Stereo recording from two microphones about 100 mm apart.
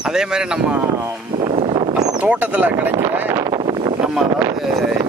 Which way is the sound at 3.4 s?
40° right (ahead or behind).